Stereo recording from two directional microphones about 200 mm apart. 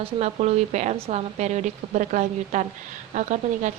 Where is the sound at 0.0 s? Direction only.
35° right (ahead or behind).